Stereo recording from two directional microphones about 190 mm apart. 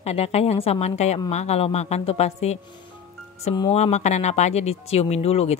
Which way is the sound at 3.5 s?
25° left (ahead or behind).